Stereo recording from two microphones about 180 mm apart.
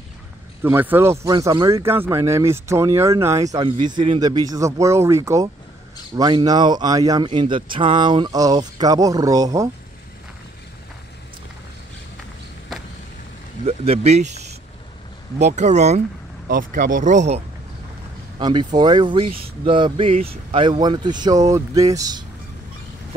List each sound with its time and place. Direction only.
0.6 s speech: 10° right (ahead or behind)
3.5 s speech: 25° right (ahead or behind)
13.7 s speech: 35° right (ahead or behind)
16.4 s speech: 50° right (ahead or behind)
18.4 s speech: 25° right (ahead or behind)